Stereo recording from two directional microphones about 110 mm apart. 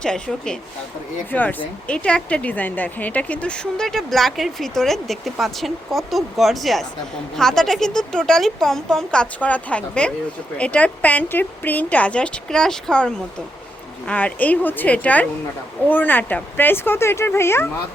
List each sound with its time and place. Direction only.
0.0 s a woman's voice: 5° left (ahead or behind); by 17.7 s 25° left (ahead or behind)